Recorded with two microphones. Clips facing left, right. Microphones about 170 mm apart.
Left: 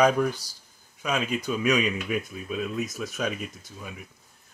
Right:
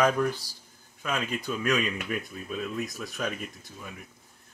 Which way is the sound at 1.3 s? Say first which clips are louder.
Left 4 dB; 15° left (ahead or behind).